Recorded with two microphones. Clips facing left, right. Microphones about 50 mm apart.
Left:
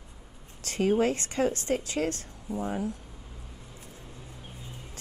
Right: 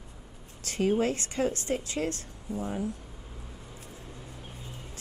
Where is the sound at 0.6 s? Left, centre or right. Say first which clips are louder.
Left 2 dB; left.